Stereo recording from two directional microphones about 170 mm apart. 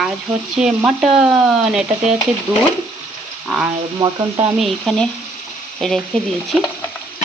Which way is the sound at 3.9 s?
25° right (ahead or behind).